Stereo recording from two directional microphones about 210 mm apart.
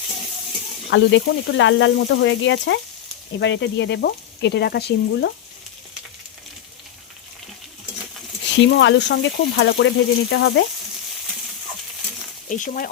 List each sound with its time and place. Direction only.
0.9 s frying: 60° left (ahead or behind)
3.4 s sizzle: 60° left (ahead or behind)
8.5 s frying: 60° left (ahead or behind)
12.5 s speech: 40° left (ahead or behind)